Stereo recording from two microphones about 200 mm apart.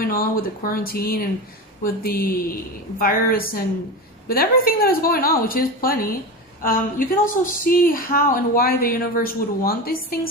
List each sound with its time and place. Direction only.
0.0 s speech: 45° left (ahead or behind)